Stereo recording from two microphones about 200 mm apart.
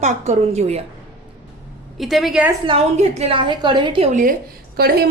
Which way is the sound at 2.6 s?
30° right (ahead or behind).